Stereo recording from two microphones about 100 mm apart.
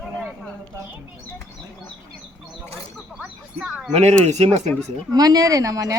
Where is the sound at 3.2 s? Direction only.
5° right (ahead or behind).